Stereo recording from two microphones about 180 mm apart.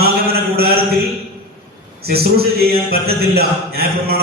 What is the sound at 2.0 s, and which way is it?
A man's voice, 60° right (ahead or behind).